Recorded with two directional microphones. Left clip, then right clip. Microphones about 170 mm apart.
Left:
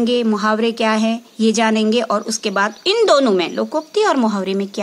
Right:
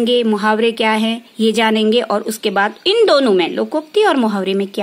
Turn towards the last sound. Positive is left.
turn(degrees=-25)  # may be behind; listen again after turning